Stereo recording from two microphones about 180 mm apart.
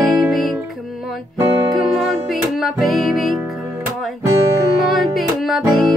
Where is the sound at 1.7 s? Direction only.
Centre (ahead or behind).